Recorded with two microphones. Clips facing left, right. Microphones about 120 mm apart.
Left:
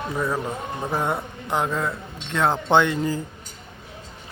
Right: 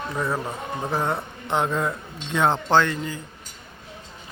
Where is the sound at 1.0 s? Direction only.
10° left (ahead or behind).